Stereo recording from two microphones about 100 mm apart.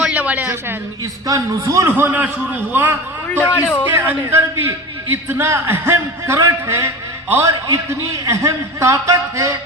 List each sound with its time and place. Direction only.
0.0 s a sound: 15° right (ahead or behind)
1.3 s a man's voice: 35° right (ahead or behind)
2.0 s a man's voice: 20° right (ahead or behind)
3.2 s a man's voice: 20° left (ahead or behind)
3.9 s a man's voice: 25° right (ahead or behind)